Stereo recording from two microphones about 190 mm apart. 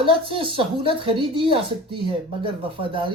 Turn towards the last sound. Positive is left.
turn(degrees=-25)  # may be behind; listen again after turning